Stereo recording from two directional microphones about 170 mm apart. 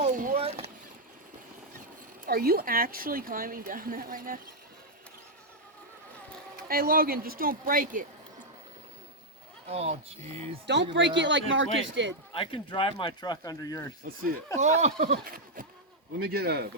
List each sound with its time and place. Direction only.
0.0 s boat: 50° right (ahead or behind)
0.3 s boat: 35° right (ahead or behind)
2.2 s a woman's voice: 60° right (ahead or behind)
6.7 s a woman's voice: 60° right (ahead or behind)
9.6 s speech: 40° right (ahead or behind)
10.9 s speech: 90° right
12.3 s speech: 30° left (ahead or behind)
14.0 s a woman's voice: 55° right (ahead or behind)
14.6 s speech: 40° right (ahead or behind)
15.1 s a sound: 55° right (ahead or behind)
16.1 s speech: 65° right (ahead or behind)